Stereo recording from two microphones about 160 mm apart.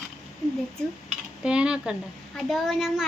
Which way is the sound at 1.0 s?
5° right (ahead or behind).